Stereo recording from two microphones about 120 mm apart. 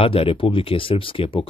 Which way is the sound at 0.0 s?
50° left (ahead or behind).